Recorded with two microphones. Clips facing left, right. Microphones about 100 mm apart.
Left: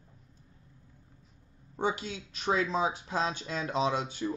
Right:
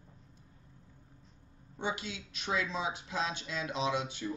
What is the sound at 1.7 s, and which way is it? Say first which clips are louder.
Speech: left 5 dB; 40° left (ahead or behind).